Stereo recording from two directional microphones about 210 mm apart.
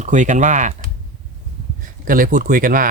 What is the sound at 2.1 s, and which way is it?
Speech, 40° right (ahead or behind).